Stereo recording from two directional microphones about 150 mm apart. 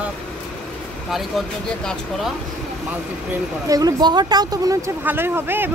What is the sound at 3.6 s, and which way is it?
Speech, 25° right (ahead or behind).